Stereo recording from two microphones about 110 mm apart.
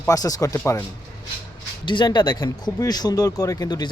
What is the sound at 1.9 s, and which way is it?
Speech, 45° left (ahead or behind).